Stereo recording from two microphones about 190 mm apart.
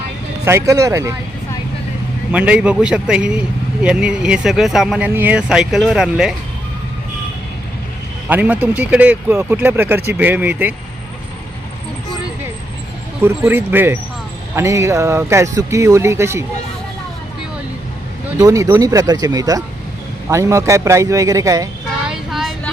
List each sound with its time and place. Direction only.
0.4 s speech: 15° right (ahead or behind)
2.3 s speech: 5° right (ahead or behind)
8.3 s speech: 10° right (ahead or behind)
13.2 s speech: 10° right (ahead or behind)
18.3 s speech: 15° right (ahead or behind)
22.0 s child singing: 5° right (ahead or behind)